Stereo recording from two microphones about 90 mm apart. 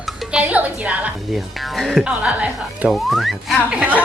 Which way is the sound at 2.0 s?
15° right (ahead or behind).